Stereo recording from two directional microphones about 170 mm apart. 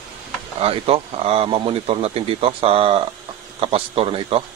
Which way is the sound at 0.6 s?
35° right (ahead or behind).